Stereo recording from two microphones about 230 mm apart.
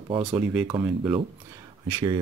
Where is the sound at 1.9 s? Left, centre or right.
Centre.